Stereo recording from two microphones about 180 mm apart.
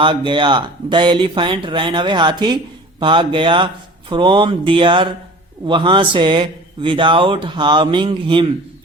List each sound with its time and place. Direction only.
0.0 s speech: 25° right (ahead or behind)